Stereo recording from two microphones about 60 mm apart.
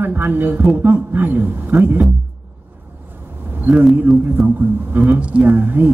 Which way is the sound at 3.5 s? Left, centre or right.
Right.